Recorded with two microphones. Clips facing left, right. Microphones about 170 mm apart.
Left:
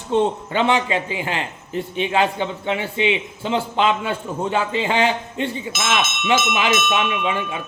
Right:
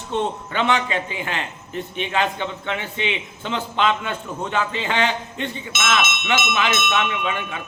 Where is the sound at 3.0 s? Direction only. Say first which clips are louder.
Left 6 dB; 30° left (ahead or behind).